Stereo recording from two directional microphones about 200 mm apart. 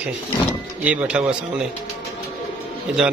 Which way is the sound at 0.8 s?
5° right (ahead or behind).